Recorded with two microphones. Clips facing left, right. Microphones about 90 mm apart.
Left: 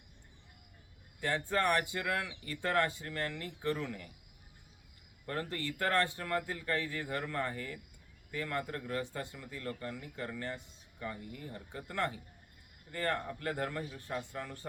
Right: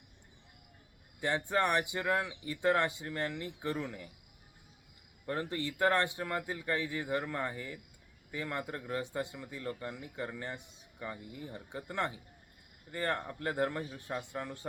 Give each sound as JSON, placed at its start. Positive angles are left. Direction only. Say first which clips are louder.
{"t": 1.2, "sound": "speech", "louder": "right 1 dB", "side_deg": -20}
{"t": 5.2, "sound": "speech", "louder": "right 2 dB", "side_deg": -20}